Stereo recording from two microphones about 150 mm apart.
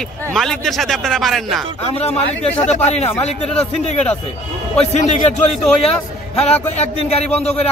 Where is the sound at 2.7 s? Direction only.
45° left (ahead or behind).